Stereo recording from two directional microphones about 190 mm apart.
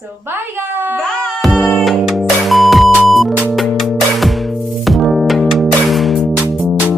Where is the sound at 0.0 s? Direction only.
10° right (ahead or behind).